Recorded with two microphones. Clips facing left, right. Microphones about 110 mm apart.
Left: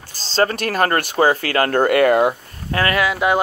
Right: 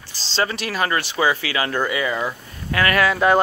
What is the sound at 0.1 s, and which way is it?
Speech, 45° left (ahead or behind).